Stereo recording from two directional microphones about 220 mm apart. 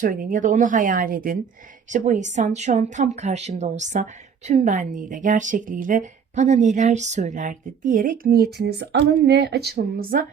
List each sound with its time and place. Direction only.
0.0 s speech: 40° right (ahead or behind)